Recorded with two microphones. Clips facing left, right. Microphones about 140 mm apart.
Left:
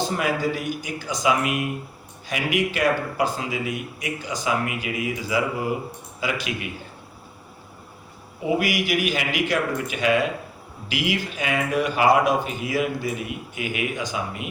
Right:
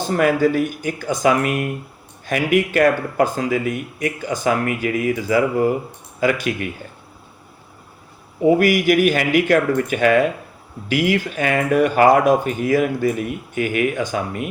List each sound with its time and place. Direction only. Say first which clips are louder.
0.1 s speech: right 8 dB; 50° right (ahead or behind)
8.4 s speech: right 9 dB; 50° right (ahead or behind)